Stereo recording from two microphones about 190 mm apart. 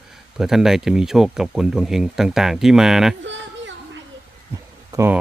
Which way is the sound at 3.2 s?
75° right (ahead or behind).